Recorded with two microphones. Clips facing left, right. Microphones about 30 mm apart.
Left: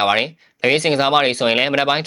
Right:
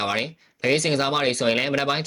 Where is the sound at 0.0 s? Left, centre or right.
Left.